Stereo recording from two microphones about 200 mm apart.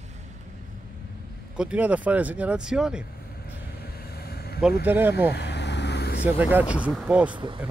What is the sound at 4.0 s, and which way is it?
Vehicle, 50° left (ahead or behind).